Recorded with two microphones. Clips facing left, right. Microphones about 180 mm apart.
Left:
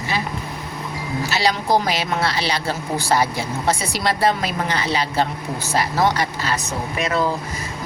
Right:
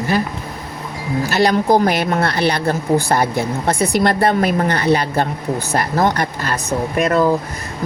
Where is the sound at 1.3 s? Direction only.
55° right (ahead or behind).